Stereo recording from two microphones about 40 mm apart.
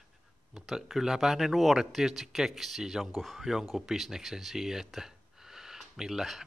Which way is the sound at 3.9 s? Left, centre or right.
Centre.